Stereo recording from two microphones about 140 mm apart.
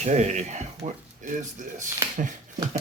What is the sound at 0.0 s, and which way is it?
Speech, 55° right (ahead or behind).